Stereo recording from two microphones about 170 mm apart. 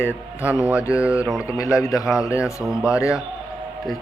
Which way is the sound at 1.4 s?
15° left (ahead or behind).